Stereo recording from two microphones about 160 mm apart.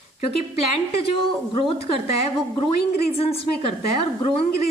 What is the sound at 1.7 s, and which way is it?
A woman's voice, 40° left (ahead or behind).